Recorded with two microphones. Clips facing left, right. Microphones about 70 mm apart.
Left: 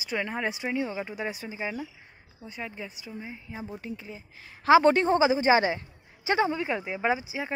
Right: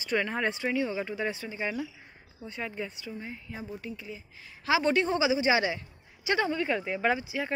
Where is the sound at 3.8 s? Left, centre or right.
Left; by 7.5 s centre.